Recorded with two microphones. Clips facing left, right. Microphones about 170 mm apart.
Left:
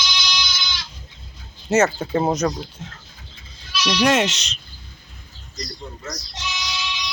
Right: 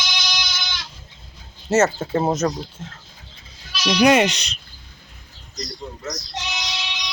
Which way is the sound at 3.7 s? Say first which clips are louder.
Right 1 dB; 45° right (ahead or behind).